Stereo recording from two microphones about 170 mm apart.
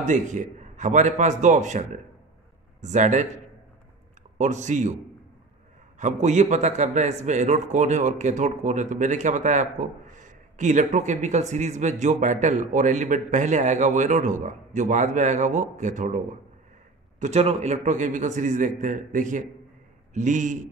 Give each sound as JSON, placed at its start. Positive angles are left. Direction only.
{"t": 0.0, "sound": "a man's voice", "side_deg": -45}
{"t": 4.4, "sound": "a man's voice", "side_deg": -45}
{"t": 5.9, "sound": "a man's voice", "side_deg": -45}